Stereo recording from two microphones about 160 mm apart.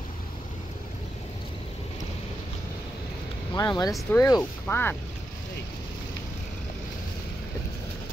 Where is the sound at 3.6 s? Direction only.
25° left (ahead or behind).